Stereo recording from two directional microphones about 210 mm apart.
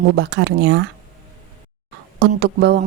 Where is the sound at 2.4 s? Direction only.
55° right (ahead or behind).